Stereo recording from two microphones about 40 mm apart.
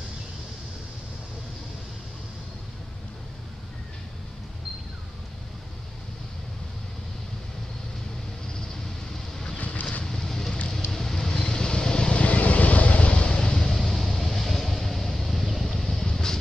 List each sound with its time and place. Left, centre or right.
9.8 s vehicle: left
10.0 s vehicle: centre